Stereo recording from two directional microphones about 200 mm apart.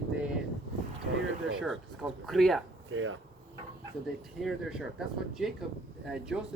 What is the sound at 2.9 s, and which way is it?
Speech, 80° right.